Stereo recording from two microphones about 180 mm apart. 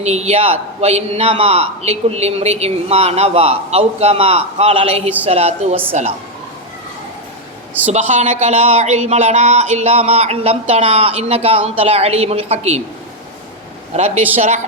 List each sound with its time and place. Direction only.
0.0 s a man's voice: 40° right (ahead or behind)
7.7 s a woman's voice: 10° right (ahead or behind)
7.9 s a man's voice: 40° right (ahead or behind)
13.9 s a man's voice: 35° right (ahead or behind)